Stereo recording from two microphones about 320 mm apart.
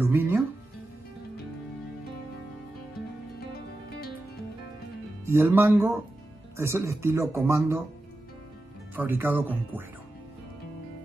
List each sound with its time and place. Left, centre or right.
0.0 s speech: centre
3.3 s music: left
5.2 s speech: centre
8.9 s speech: centre